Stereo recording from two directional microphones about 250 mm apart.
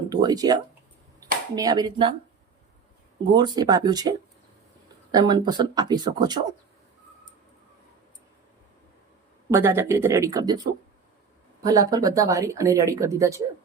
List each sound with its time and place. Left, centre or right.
0.1 s speech: centre
3.3 s speech: centre
5.1 s speech: centre
9.5 s speech: centre
11.6 s speech: centre